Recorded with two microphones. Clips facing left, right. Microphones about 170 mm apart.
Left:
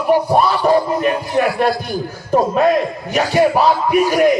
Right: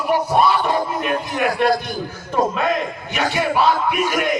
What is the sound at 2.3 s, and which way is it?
Speech, 40° left (ahead or behind).